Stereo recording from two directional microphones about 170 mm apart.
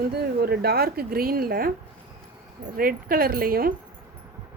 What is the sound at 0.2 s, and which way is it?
A woman's voice, 65° right (ahead or behind).